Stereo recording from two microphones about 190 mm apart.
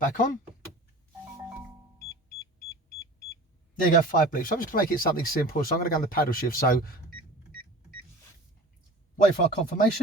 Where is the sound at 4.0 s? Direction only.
45° left (ahead or behind).